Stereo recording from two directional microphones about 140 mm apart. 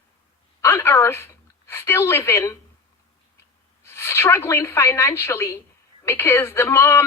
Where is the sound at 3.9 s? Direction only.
20° left (ahead or behind).